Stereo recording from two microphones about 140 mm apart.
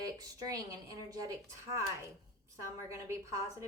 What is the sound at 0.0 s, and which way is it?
A woman's voice, 25° right (ahead or behind).